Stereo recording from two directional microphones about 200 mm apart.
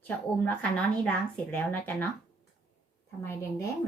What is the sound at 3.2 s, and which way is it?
Speech, 15° left (ahead or behind).